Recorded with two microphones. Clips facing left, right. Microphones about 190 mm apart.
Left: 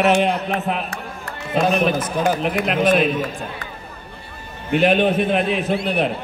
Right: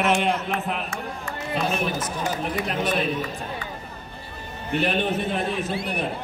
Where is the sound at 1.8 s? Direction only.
90° left.